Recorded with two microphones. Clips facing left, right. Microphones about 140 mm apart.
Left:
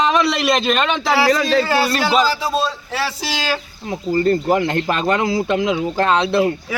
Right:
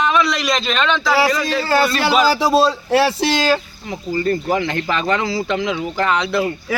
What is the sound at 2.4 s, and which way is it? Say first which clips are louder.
Speech: right 6 dB; 75° right (ahead or behind).